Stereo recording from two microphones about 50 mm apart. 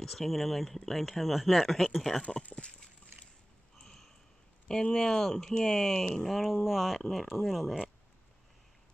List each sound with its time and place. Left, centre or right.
0.0 s speech: centre
2.2 s speech: left
3.7 s a sound: centre
4.6 s speech: centre